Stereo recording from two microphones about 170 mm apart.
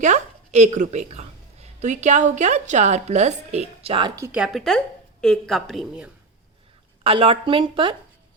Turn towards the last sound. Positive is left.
turn(degrees=-30)  # may be behind; listen again after turning